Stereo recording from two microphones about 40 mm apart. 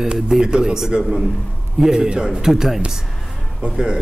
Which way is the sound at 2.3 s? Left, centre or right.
Centre.